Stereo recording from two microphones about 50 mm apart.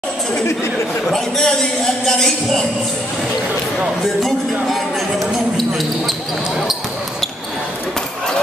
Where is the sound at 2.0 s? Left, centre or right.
Centre.